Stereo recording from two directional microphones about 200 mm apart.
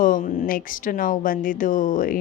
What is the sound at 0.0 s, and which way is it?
Speech, 45° left (ahead or behind).